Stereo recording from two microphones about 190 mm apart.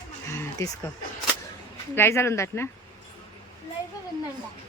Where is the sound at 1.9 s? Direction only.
15° left (ahead or behind).